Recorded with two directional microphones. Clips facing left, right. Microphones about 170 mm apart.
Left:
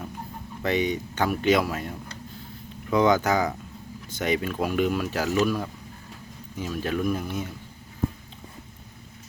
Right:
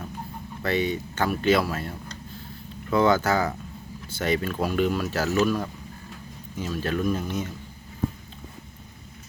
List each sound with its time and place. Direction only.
0.6 s speech: 20° left (ahead or behind)